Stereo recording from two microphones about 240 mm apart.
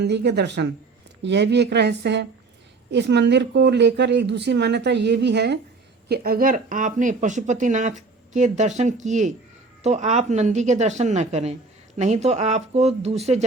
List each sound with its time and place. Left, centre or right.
0.0 s speech: right